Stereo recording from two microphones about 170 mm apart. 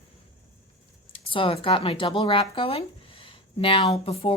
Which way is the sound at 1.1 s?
30° left (ahead or behind).